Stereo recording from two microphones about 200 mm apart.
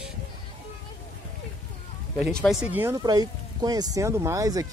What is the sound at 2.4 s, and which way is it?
Speech, 5° right (ahead or behind).